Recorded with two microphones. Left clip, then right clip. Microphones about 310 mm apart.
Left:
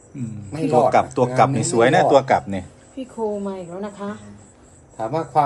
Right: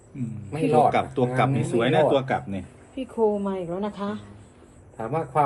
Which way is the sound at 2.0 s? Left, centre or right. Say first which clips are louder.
Left 6 dB; left.